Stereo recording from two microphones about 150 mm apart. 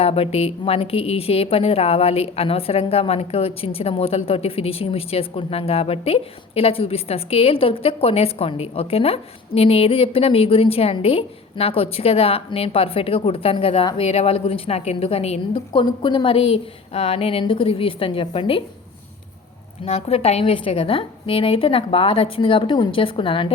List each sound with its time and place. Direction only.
0.0 s speech: 40° left (ahead or behind)
19.8 s speech: 40° left (ahead or behind)